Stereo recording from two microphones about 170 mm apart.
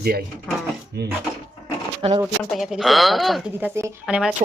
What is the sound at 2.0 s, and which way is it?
Speech, 35° right (ahead or behind).